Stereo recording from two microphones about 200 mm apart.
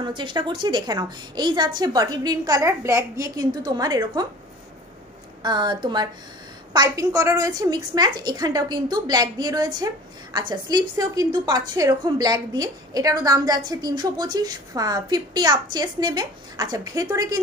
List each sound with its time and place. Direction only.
0.0 s a woman's voice: 25° right (ahead or behind)
5.4 s a woman's voice: 20° right (ahead or behind)